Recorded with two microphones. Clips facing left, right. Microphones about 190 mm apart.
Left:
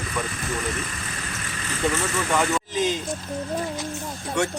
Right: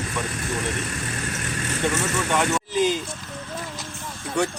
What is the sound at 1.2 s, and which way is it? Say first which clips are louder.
Vehicle: right 5 dB; 50° right (ahead or behind).